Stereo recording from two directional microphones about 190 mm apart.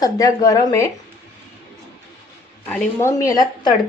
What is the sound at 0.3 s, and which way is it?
Speech, 20° left (ahead or behind).